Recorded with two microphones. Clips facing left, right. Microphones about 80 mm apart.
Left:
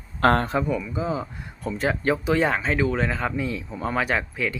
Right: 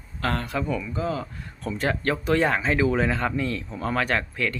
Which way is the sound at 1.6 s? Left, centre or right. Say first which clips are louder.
Left 1 dB; centre.